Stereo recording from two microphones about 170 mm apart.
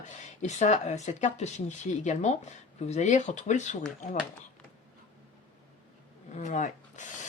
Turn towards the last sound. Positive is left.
turn(degrees=45)  # may be behind; listen again after turning